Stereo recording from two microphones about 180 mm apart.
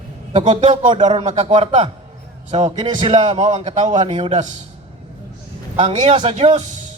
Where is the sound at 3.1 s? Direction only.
40° right (ahead or behind).